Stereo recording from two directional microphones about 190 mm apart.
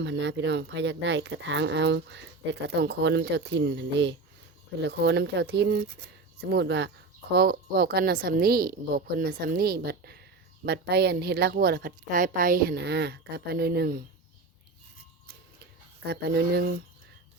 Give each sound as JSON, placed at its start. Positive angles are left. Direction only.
{"t": 0.0, "sound": "speech", "side_deg": -65}
{"t": 7.3, "sound": "a woman's voice", "side_deg": -55}
{"t": 16.0, "sound": "speech", "side_deg": -60}